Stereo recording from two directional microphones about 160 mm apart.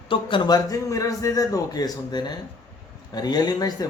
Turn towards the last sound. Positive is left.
turn(degrees=25)  # may be behind; listen again after turning